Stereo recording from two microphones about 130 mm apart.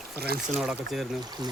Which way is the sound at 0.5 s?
5° right (ahead or behind).